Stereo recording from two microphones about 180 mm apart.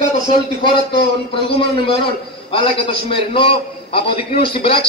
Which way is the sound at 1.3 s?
30° left (ahead or behind).